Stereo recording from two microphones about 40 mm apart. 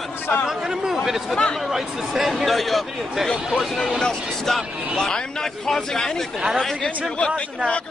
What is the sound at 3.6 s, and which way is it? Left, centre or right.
Speech, centre.